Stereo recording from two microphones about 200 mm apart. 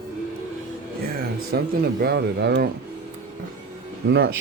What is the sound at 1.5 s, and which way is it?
Speech, 50° right (ahead or behind).